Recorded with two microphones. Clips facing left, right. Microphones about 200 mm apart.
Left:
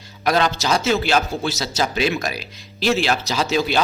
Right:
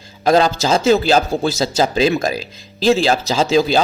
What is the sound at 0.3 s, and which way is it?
A man's voice, 30° right (ahead or behind).